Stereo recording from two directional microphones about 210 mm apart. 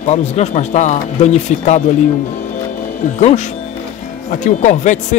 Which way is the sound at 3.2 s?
35° left (ahead or behind).